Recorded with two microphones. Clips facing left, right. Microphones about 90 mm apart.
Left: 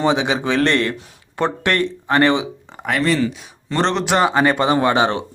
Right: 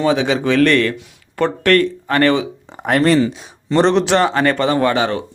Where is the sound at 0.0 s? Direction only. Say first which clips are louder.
Right 2 dB; 20° left (ahead or behind).